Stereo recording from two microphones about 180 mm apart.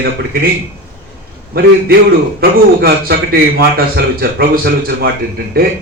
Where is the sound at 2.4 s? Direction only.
55° right (ahead or behind).